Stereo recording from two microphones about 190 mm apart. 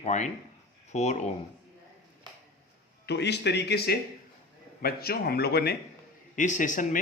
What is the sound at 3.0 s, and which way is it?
Speech, 65° left (ahead or behind).